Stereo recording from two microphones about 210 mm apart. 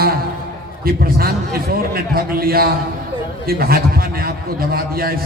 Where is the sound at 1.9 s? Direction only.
45° right (ahead or behind).